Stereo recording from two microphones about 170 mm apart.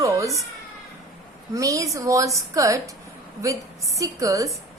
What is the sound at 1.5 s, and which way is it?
A woman's voice, 20° right (ahead or behind).